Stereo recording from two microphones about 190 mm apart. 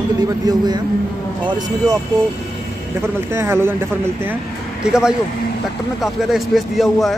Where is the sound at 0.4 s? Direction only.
20° right (ahead or behind).